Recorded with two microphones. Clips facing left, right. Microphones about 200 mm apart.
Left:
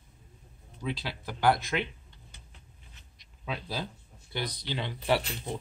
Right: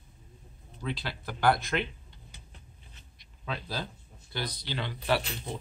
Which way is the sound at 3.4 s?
10° left (ahead or behind).